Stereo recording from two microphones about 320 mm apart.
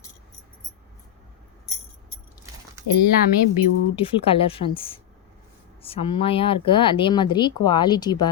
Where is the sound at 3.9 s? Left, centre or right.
Centre.